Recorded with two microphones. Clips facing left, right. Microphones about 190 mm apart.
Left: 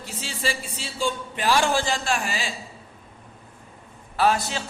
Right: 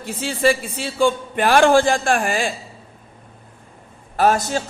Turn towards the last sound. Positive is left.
turn(degrees=-45)  # may be behind; listen again after turning